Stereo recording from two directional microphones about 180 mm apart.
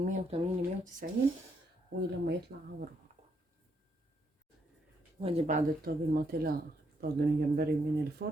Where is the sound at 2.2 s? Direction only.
65° right (ahead or behind).